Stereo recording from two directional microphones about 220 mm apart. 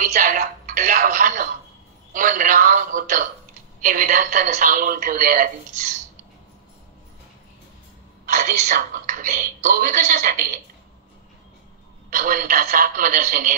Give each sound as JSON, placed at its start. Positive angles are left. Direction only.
{"t": 0.0, "sound": "television", "side_deg": -35}
{"t": 2.1, "sound": "speech", "side_deg": -35}
{"t": 8.4, "sound": "speech", "side_deg": -35}
{"t": 12.2, "sound": "speech", "side_deg": -35}